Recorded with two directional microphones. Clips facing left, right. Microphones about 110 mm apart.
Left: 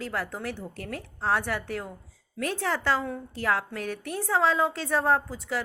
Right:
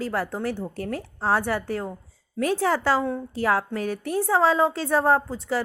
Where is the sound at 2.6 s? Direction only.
45° right (ahead or behind).